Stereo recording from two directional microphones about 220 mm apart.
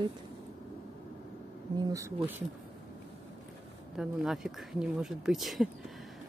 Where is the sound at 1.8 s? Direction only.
15° right (ahead or behind).